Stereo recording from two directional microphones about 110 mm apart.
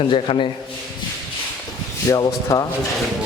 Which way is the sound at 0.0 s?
55° left (ahead or behind).